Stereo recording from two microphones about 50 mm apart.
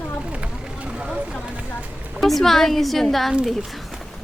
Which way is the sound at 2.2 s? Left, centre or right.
Centre.